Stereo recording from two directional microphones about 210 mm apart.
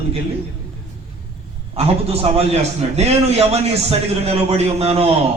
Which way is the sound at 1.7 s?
30° right (ahead or behind).